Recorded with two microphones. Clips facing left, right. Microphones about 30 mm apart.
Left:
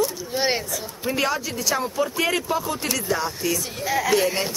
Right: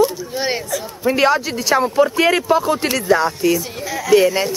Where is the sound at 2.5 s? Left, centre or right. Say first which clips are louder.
Right 9 dB; right.